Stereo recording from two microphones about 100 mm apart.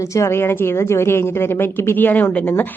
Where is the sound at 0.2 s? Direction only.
25° left (ahead or behind).